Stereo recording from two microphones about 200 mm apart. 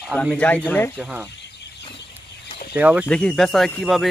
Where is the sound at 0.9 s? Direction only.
5° right (ahead or behind).